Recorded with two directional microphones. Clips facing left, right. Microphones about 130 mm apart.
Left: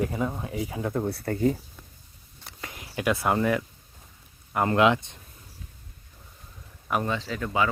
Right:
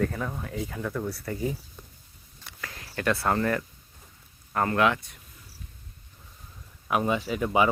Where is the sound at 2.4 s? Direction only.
20° left (ahead or behind).